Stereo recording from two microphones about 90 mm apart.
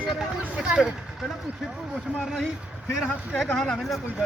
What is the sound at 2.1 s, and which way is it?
Speech, 15° right (ahead or behind).